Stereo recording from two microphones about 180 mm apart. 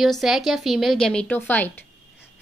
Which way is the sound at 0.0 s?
Centre (ahead or behind).